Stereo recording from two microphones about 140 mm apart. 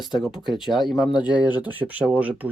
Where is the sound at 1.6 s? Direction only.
10° right (ahead or behind).